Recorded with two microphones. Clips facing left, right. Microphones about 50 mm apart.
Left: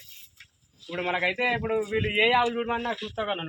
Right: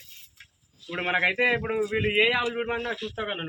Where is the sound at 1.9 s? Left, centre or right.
Centre.